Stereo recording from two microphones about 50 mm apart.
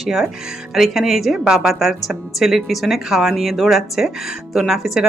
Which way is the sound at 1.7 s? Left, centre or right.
Centre.